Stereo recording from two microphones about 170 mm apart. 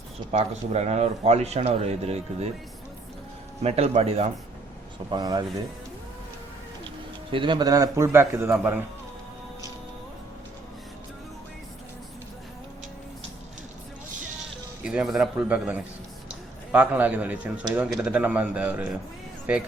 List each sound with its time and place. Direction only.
0.3 s speech: 40° right (ahead or behind)
3.6 s speech: 40° right (ahead or behind)
5.1 s speech: 25° right (ahead or behind)
7.3 s a man's voice: 30° right (ahead or behind); by 8.8 s 10° right (ahead or behind)
14.8 s a man's voice: 5° right (ahead or behind)